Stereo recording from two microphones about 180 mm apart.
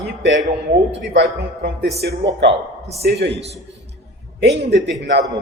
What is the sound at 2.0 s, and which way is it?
Speech, 75° right (ahead or behind).